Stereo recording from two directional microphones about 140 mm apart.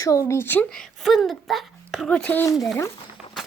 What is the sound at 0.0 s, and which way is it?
Speech, 20° left (ahead or behind).